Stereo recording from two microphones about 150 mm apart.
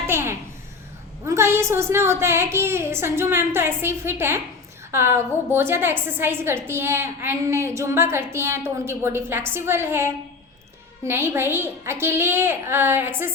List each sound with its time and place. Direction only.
0.1 s babbling: 15° right (ahead or behind)
1.2 s a woman's voice: 20° right (ahead or behind)